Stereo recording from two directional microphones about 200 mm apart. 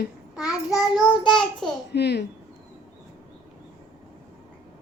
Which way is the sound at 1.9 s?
55° left (ahead or behind).